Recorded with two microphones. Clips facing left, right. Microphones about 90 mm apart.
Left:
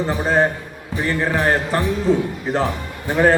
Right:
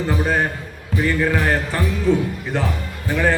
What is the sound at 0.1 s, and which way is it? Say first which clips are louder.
Music: left 3 dB; 30° left (ahead or behind).